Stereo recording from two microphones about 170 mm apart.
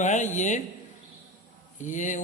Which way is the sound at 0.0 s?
45° left (ahead or behind).